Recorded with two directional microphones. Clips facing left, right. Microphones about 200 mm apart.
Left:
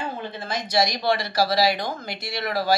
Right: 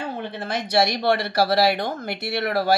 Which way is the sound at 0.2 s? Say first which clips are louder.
Right 2 dB; 65° right (ahead or behind).